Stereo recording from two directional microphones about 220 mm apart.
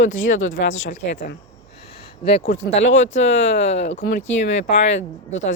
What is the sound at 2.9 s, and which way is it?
Speech, 55° left (ahead or behind).